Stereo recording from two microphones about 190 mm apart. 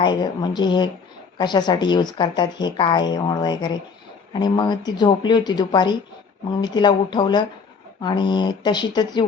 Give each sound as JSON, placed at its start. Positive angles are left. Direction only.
{"t": 0.0, "sound": "speech", "side_deg": 25}